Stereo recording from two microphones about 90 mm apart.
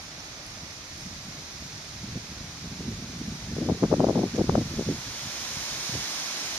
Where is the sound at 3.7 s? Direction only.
15° right (ahead or behind).